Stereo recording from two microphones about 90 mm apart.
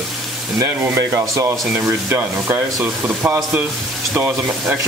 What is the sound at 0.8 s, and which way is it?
Stir, 30° right (ahead or behind).